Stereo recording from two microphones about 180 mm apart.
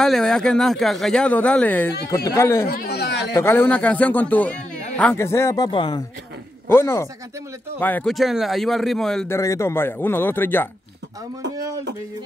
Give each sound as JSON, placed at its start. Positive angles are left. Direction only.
{"t": 0.0, "sound": "a man's voice", "side_deg": 5}
{"t": 2.7, "sound": "a sound", "side_deg": 60}
{"t": 3.3, "sound": "a man's voice", "side_deg": 10}
{"t": 6.7, "sound": "a man's voice", "side_deg": 15}
{"t": 9.3, "sound": "a man's voice", "side_deg": 15}